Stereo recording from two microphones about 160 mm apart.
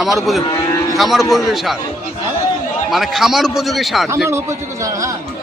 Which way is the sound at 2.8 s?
Centre (ahead or behind).